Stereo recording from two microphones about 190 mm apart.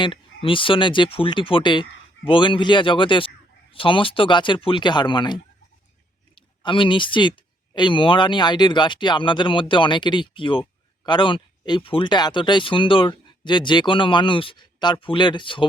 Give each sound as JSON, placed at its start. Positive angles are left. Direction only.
{"t": 0.0, "sound": "speech", "side_deg": 25}